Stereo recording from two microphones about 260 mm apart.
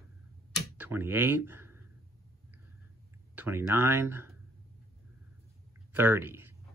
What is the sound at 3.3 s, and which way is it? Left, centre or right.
Speech, centre.